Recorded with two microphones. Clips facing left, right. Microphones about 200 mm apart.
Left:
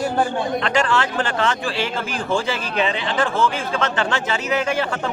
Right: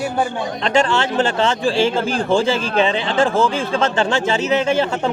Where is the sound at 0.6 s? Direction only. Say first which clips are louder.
Right 6 dB; 25° right (ahead or behind).